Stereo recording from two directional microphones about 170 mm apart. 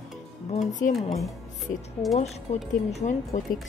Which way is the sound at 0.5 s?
45° left (ahead or behind).